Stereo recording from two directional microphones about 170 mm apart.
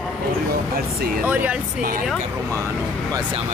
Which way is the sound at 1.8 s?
55° right (ahead or behind).